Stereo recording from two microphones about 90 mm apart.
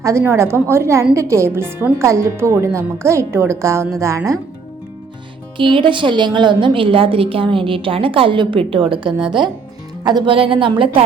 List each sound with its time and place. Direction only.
0.0 s a woman's voice: 35° right (ahead or behind)
5.5 s a woman's voice: 65° right (ahead or behind)
10.2 s a woman's voice: 85° right